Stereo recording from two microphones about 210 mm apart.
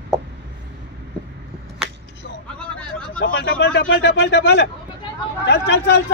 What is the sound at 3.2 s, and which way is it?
Speech, 55° left (ahead or behind).